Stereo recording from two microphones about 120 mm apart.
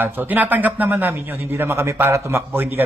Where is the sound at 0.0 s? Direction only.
15° right (ahead or behind).